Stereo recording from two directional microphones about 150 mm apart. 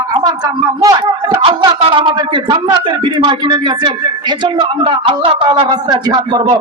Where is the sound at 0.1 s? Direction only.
25° right (ahead or behind).